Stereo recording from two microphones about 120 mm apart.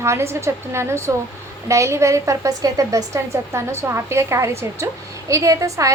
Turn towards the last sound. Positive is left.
turn(degrees=-25)  # may be behind; listen again after turning